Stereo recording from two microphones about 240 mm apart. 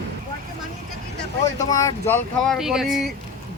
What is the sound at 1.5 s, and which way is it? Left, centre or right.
Speech, centre.